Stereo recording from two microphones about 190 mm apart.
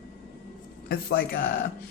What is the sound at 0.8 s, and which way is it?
Speech, 55° left (ahead or behind).